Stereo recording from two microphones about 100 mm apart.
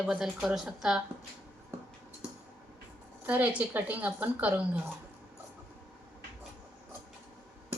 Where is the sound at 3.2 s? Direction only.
15° right (ahead or behind).